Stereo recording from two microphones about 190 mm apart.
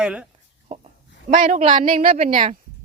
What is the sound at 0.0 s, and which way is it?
Speech, 5° right (ahead or behind).